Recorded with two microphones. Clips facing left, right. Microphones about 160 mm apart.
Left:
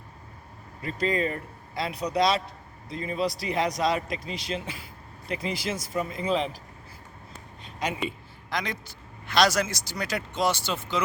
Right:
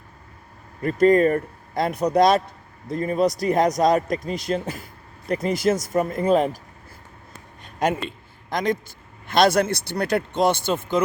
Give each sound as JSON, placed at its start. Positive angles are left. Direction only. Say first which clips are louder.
{"t": 0.8, "sound": "speech", "louder": "right 11 dB", "side_deg": -50}
{"t": 7.6, "sound": "a sound", "louder": "right 9 dB", "side_deg": -50}
{"t": 8.4, "sound": "speech", "louder": "right 8 dB", "side_deg": -50}